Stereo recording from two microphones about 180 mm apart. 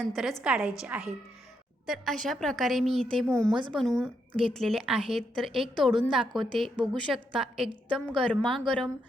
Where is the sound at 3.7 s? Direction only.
Centre (ahead or behind).